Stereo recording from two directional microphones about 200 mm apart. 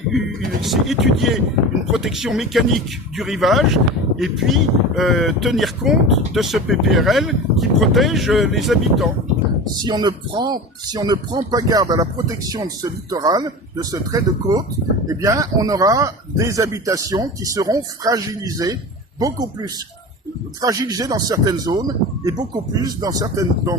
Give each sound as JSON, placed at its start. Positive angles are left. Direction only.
{"t": 0.1, "sound": "a sound", "side_deg": 0}
{"t": 0.6, "sound": "speech", "side_deg": 0}
{"t": 9.8, "sound": "speech", "side_deg": -20}